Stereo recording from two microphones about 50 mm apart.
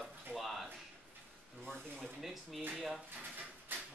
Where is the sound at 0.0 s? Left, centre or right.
Centre.